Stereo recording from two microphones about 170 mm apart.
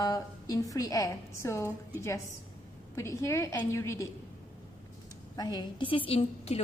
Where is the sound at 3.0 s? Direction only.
15° left (ahead or behind).